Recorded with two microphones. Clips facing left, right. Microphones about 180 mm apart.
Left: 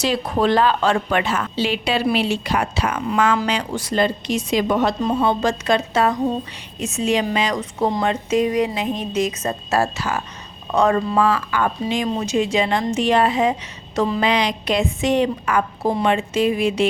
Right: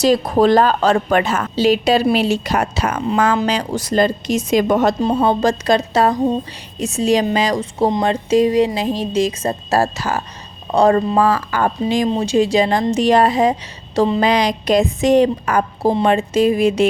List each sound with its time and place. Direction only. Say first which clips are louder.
0.0 s a woman's voice: right 6 dB; 40° right (ahead or behind)